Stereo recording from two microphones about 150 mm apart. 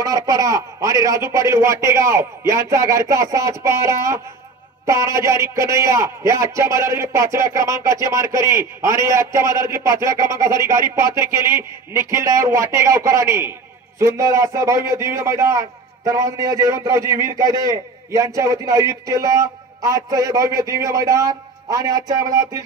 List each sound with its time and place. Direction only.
0.0 s a man's voice: 25° right (ahead or behind)